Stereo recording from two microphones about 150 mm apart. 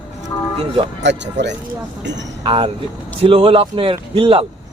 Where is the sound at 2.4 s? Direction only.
30° right (ahead or behind).